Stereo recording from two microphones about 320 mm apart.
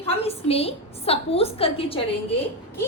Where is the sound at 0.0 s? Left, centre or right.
Centre.